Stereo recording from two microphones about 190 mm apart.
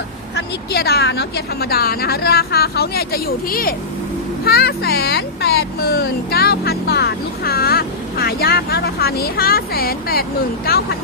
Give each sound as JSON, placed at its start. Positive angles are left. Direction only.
{"t": 0.3, "sound": "speech", "side_deg": 55}